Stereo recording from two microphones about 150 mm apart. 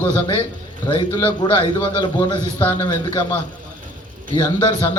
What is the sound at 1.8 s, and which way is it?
A man's voice, 30° left (ahead or behind).